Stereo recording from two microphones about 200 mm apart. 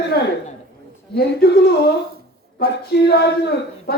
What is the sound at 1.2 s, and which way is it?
Speech, 50° left (ahead or behind).